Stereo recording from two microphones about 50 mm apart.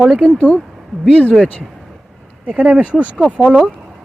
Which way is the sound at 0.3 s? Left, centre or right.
Left.